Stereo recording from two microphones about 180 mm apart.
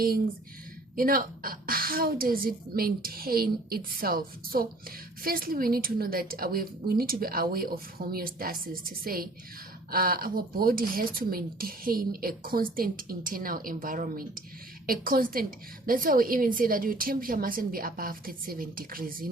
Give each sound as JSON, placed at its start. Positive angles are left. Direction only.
{"t": 0.9, "sound": "a woman's voice", "side_deg": -50}